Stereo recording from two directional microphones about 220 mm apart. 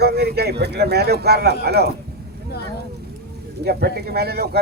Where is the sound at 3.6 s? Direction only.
45° right (ahead or behind).